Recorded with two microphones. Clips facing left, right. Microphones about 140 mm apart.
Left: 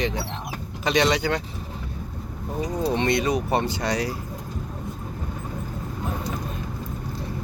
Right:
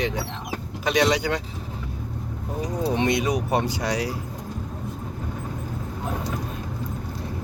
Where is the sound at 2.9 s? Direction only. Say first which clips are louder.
Even; 10° right (ahead or behind).